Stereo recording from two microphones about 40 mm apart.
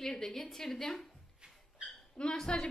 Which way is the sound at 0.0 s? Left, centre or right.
Centre.